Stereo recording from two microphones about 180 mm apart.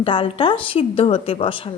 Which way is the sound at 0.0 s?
30° left (ahead or behind).